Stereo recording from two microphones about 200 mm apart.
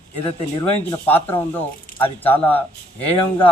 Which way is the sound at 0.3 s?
10° left (ahead or behind).